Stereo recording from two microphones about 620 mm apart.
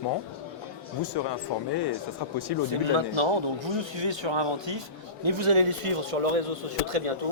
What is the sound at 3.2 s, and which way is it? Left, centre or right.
A man's voice, right.